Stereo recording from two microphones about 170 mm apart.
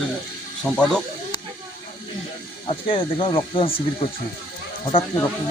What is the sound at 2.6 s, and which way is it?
Speech, 30° left (ahead or behind).